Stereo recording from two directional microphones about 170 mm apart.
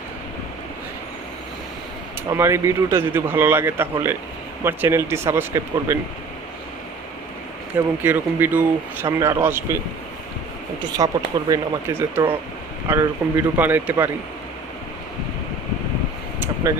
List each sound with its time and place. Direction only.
2.3 s speech: 15° right (ahead or behind)
8.0 s speech: 10° right (ahead or behind)
10.9 s speech: 20° right (ahead or behind)